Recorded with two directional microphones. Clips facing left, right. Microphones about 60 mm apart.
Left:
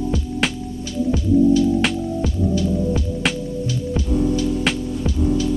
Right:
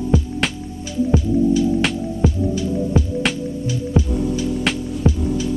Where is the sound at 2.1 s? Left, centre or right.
Right.